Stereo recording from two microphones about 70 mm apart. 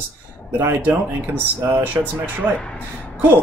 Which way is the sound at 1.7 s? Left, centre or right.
Right.